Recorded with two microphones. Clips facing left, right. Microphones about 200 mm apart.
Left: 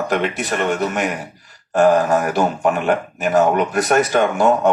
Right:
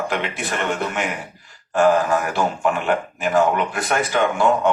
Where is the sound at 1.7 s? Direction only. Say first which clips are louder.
Left 3 dB; 40° left (ahead or behind).